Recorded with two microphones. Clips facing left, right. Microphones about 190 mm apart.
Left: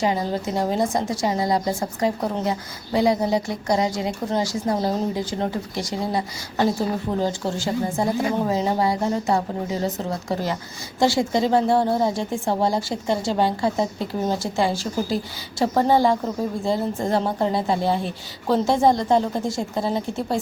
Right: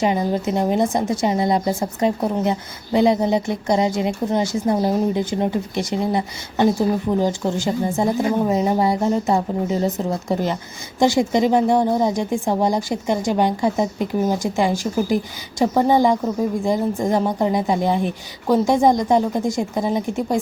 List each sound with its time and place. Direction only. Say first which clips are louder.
0.0 s a woman's voice: right 3 dB; 20° right (ahead or behind)